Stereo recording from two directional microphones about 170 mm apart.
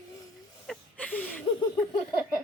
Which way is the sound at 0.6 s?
5° left (ahead or behind).